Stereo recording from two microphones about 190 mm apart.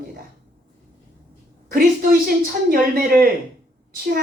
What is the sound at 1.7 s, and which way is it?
A woman's voice, 50° right (ahead or behind).